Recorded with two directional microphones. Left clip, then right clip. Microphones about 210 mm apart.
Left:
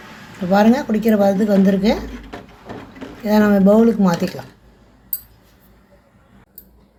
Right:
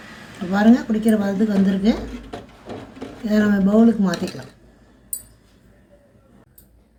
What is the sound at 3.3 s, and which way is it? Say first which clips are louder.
Speech: left 6 dB; 45° left (ahead or behind).